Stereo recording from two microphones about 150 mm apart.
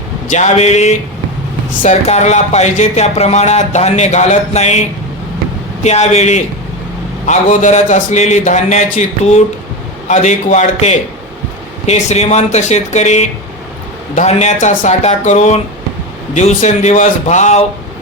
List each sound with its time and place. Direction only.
0.3 s speech: 50° left (ahead or behind)